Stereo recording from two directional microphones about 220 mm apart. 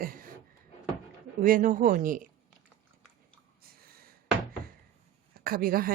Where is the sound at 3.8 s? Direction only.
45° right (ahead or behind).